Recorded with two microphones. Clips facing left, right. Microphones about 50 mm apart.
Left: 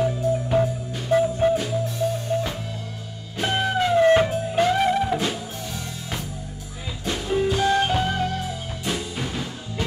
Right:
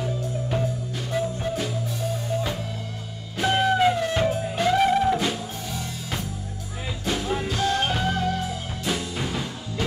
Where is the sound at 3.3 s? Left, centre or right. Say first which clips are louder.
Right 2 dB; centre.